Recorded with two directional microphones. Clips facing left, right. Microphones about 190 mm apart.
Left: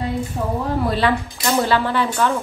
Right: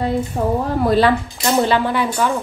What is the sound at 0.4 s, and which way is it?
Speech, 50° right (ahead or behind).